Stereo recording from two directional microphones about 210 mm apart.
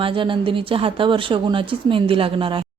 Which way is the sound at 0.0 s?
25° right (ahead or behind).